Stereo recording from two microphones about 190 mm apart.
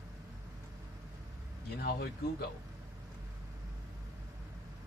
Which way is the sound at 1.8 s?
55° left (ahead or behind).